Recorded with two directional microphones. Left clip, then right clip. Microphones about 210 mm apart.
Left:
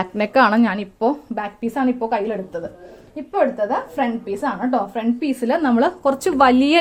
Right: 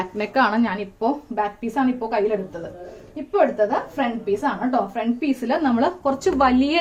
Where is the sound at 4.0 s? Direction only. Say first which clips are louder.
Even; 50° left (ahead or behind).